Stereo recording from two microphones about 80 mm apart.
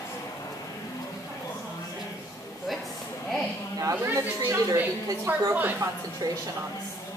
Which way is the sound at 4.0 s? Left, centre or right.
Right.